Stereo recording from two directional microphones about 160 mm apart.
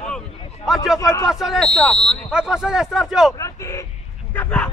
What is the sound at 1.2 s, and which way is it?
Speech, centre (ahead or behind).